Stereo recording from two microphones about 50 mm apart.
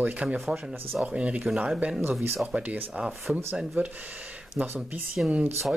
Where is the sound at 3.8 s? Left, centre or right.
Right.